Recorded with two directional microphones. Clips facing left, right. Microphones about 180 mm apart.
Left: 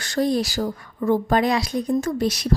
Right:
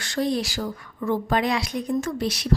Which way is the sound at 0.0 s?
40° left (ahead or behind).